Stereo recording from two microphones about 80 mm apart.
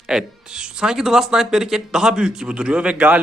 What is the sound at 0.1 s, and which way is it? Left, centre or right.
A man's voice, centre.